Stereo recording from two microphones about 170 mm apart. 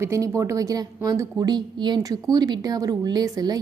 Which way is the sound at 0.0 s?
20° right (ahead or behind).